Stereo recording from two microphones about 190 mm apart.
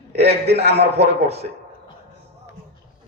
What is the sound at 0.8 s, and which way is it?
Speech, 35° right (ahead or behind).